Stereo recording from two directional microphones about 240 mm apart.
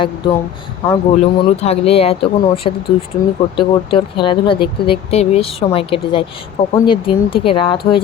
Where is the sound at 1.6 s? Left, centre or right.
Left.